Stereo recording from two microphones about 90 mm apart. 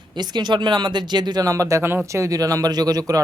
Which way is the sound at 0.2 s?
55° right (ahead or behind).